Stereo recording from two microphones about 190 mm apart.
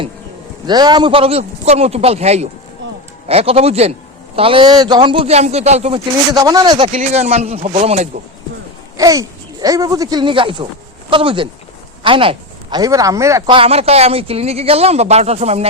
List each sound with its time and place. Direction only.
0.7 s speech: 20° right (ahead or behind)
2.8 s a sound: 75° right (ahead or behind)
3.2 s speech: 30° right (ahead or behind)
6.3 s speech: 20° right (ahead or behind); by 8.2 s 35° right (ahead or behind)
9.0 s speech: 20° right (ahead or behind)
13.5 s speech: 30° right (ahead or behind)